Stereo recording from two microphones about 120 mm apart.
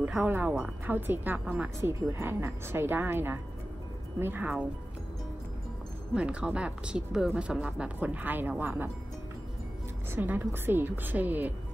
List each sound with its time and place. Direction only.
0.0 s speech: 10° right (ahead or behind)
6.1 s speech: 10° right (ahead or behind)
10.1 s speech: 20° right (ahead or behind)